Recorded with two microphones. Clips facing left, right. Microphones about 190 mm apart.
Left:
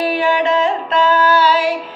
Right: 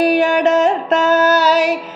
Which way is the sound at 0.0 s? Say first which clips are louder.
Right 3 dB; 45° right (ahead or behind).